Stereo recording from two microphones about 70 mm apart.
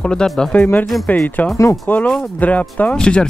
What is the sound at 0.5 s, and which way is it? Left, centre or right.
Speech, left.